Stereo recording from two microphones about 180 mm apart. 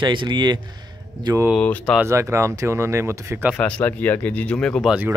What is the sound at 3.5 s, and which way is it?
Speech, 10° left (ahead or behind).